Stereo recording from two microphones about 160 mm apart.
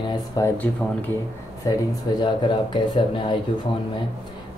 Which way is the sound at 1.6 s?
20° left (ahead or behind).